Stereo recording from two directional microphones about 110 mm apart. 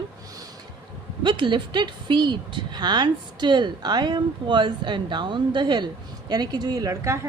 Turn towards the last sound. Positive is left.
turn(degrees=-25)  # may be behind; listen again after turning